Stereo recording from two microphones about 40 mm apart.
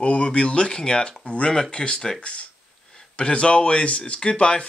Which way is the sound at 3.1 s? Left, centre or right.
Left.